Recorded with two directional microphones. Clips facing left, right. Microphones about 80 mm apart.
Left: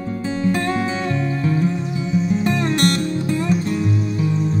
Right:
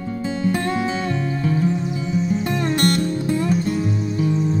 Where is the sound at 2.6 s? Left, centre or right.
Right.